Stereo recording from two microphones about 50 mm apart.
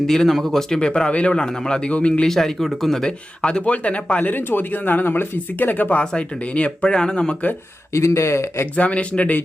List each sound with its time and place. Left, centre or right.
0.1 s speech: centre
0.8 s speech: centre
1.9 s speech: left
2.2 s speech: centre
3.4 s speech: left
6.1 s speech: left
7.9 s speech: left
8.7 s speech: left